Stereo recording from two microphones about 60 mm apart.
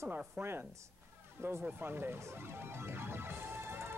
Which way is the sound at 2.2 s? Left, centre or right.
Right.